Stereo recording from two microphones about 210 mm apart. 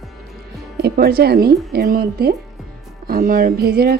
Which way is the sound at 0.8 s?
50° right (ahead or behind).